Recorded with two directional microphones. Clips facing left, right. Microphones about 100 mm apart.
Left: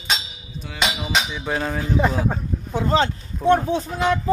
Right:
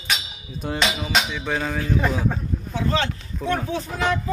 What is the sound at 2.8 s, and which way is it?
Speech, 30° left (ahead or behind).